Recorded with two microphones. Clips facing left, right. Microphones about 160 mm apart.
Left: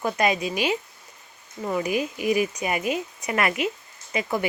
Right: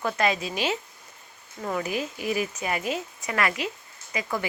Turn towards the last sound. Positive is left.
turn(degrees=20)  # may be behind; listen again after turning